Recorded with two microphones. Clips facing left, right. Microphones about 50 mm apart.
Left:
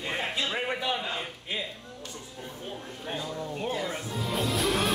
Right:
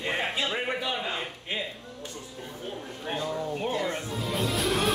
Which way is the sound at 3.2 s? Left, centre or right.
Centre.